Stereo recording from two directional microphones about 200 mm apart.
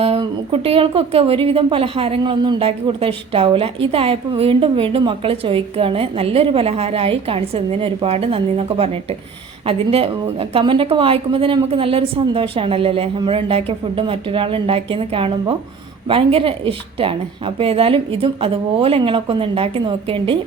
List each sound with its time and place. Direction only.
0.0 s a woman's voice: 30° right (ahead or behind)